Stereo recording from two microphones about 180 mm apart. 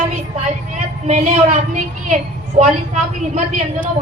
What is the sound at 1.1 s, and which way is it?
A woman's voice, 40° right (ahead or behind).